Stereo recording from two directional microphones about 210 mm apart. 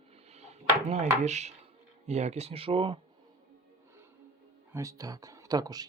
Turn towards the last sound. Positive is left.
turn(degrees=-20)  # may be behind; listen again after turning